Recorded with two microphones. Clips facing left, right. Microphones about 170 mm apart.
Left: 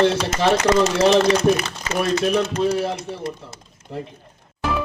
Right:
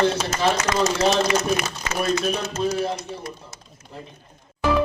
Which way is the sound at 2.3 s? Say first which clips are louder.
Left 5 dB; 65° left (ahead or behind).